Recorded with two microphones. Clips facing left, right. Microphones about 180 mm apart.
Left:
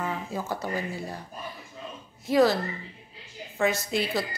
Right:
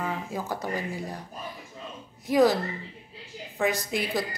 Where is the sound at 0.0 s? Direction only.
15° right (ahead or behind).